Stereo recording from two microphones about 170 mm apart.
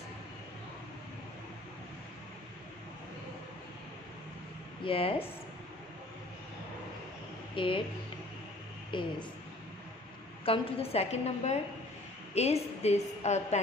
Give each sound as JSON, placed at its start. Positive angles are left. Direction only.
{"t": 4.8, "sound": "a woman's voice", "side_deg": 35}
{"t": 7.5, "sound": "a woman's voice", "side_deg": 30}
{"t": 8.9, "sound": "a woman's voice", "side_deg": 30}
{"t": 10.4, "sound": "a woman's voice", "side_deg": 35}